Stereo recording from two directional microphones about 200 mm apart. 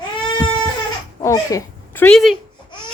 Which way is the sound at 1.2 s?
15° left (ahead or behind).